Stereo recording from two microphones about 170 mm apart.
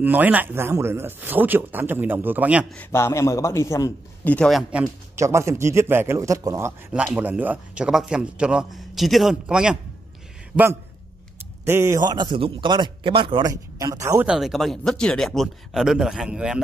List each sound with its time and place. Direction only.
0.0 s speech: 10° right (ahead or behind)
2.7 s a man's voice: 10° left (ahead or behind); by 5.2 s 5° right (ahead or behind)
5.2 s speech: 15° right (ahead or behind)
6.9 s a man's voice: 10° right (ahead or behind); by 13.5 s 30° right (ahead or behind)
13.5 s a man's voice: 20° right (ahead or behind)
14.2 s speech: 5° right (ahead or behind)